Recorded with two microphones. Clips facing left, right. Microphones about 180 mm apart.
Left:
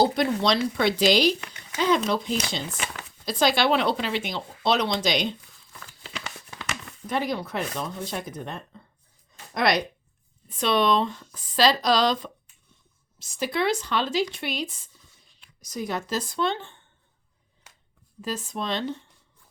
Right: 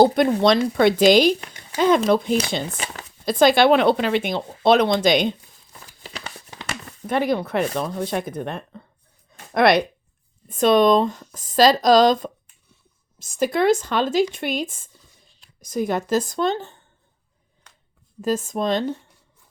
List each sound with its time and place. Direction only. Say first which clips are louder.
0.0 s speech: right 7 dB; 50° right (ahead or behind)
2.6 s speech: right 2 dB; 35° right (ahead or behind)
3.2 s speech: right 7 dB; 55° right (ahead or behind)
6.1 s crumpling: right 1 dB; 35° right (ahead or behind)
7.1 s speech: right 6 dB; 55° right (ahead or behind)
9.3 s a sound: right 7 dB; 55° right (ahead or behind)
10.5 s speech: right 7 dB; 45° right (ahead or behind)
17.7 s a sound: even; 10° left (ahead or behind)
18.2 s speech: right 8 dB; 45° right (ahead or behind)